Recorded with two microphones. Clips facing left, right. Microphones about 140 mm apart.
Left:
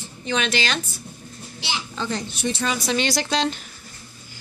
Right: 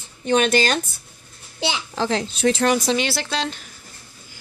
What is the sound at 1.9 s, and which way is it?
Speech, 85° right.